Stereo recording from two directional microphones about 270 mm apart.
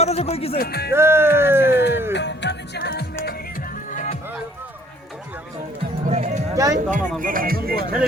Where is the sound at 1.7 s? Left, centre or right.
Left.